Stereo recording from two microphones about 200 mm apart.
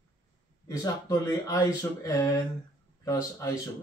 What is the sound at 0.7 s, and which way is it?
Speech, 15° left (ahead or behind).